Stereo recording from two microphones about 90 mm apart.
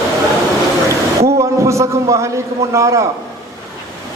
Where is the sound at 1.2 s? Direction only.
35° right (ahead or behind).